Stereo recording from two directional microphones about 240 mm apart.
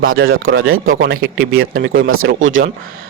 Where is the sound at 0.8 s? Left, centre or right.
Right.